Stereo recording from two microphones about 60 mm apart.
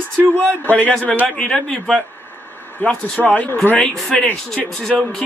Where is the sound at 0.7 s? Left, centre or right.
Left.